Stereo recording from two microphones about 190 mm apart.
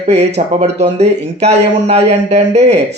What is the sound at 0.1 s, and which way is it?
Speech, 35° right (ahead or behind).